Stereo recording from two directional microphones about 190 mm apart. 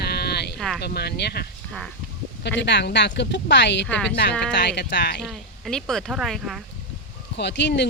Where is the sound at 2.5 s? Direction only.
65° left (ahead or behind).